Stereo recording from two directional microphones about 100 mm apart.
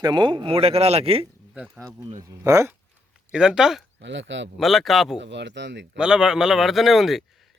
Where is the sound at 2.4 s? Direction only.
30° right (ahead or behind).